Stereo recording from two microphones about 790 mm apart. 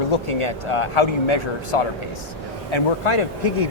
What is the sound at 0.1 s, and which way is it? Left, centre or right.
Speech, left.